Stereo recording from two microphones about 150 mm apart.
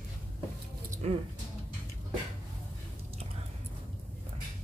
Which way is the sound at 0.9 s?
45° right (ahead or behind).